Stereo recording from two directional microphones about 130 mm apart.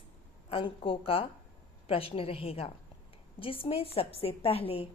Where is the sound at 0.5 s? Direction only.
45° left (ahead or behind).